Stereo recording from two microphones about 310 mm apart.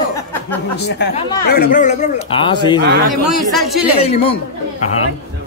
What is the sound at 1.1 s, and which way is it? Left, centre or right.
Speech, centre.